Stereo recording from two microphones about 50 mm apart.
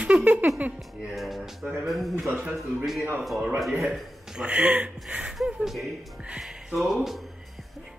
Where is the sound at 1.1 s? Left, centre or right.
Centre.